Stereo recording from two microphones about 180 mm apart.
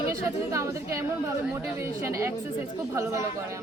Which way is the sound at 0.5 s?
15° right (ahead or behind).